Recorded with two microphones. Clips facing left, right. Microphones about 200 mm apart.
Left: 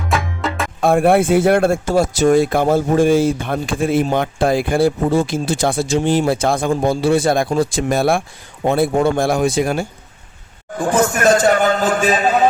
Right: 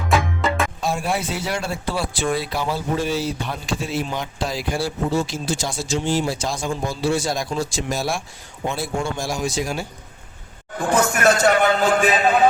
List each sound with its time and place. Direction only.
0.1 s music: centre (ahead or behind)
0.8 s a man's voice: 55° left (ahead or behind)